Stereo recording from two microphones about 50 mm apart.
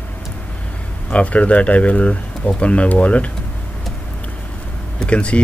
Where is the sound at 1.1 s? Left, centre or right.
Left.